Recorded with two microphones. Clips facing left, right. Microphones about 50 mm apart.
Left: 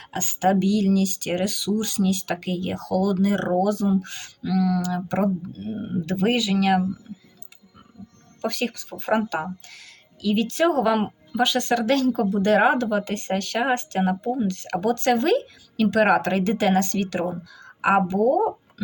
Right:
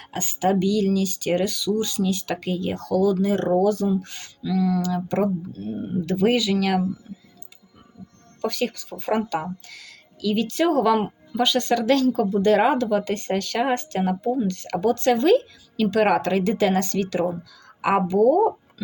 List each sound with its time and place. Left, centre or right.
0.1 s speech: left
1.8 s speech: left
4.4 s a sound: left
5.2 s speech: left
8.4 s speech: left